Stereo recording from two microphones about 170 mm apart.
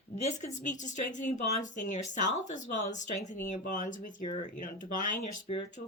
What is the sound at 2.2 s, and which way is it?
Speech, 45° left (ahead or behind).